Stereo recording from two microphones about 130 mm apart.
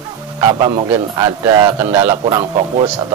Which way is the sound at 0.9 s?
25° right (ahead or behind).